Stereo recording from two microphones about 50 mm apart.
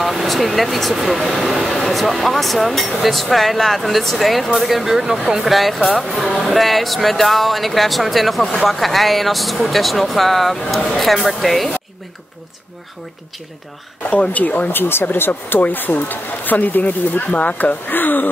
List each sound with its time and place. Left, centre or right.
0.0 s speech: centre
14.3 s speech: left
14.7 s speech: left
17.8 s speech: left